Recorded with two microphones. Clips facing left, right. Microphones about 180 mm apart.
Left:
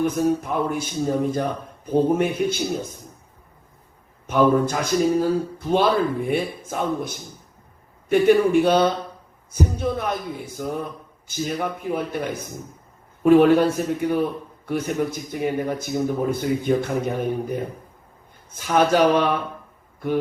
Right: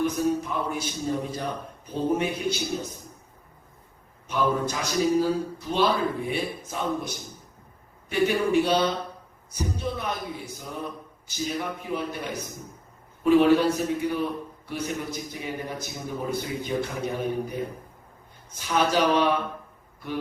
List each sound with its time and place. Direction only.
0.0 s a man's voice: 55° left (ahead or behind)
4.3 s a man's voice: 50° left (ahead or behind)